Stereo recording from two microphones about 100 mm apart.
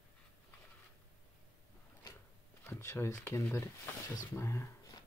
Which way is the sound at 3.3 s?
30° left (ahead or behind).